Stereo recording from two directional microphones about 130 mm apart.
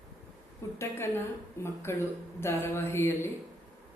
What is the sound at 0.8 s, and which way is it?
Speech, 20° left (ahead or behind).